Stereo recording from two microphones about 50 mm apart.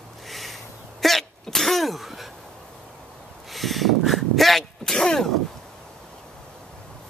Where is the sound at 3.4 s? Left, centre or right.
Centre.